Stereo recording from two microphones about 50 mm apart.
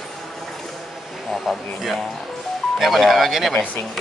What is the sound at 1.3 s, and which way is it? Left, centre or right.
Speech, centre.